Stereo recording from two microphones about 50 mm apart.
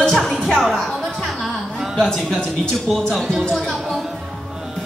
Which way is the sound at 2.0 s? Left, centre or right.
Centre.